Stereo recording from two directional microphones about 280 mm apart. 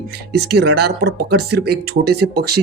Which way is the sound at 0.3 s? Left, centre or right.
Right.